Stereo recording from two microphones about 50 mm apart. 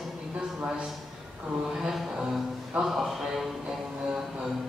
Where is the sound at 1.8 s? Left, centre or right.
Centre.